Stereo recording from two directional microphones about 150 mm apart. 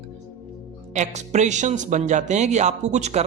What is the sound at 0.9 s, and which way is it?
Speech, 50° right (ahead or behind).